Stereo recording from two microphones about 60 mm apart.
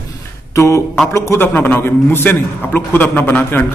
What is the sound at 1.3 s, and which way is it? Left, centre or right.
A man's voice, left.